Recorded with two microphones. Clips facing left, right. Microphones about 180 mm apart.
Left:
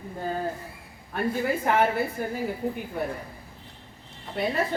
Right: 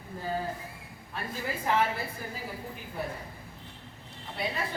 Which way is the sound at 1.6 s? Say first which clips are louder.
Left 3 dB; 60° left (ahead or behind).